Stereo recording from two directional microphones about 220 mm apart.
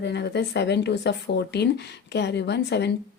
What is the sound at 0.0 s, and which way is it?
Speech, 50° left (ahead or behind).